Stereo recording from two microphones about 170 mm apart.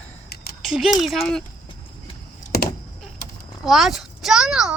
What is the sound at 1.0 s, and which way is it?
Speech, centre (ahead or behind).